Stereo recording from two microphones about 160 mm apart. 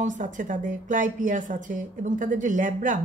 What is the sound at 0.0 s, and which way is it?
A woman's voice, 50° right (ahead or behind).